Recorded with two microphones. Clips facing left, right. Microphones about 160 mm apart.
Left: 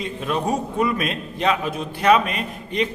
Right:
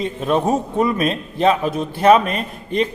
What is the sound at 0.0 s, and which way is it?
A man's voice, 35° right (ahead or behind).